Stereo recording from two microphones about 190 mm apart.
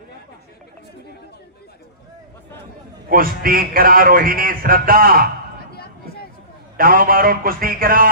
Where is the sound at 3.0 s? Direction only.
50° right (ahead or behind).